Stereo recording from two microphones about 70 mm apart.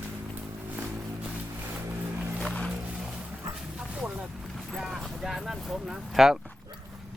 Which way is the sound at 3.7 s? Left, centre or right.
Centre.